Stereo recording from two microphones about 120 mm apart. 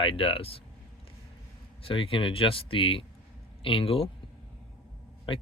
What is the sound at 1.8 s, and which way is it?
Speech, 50° left (ahead or behind).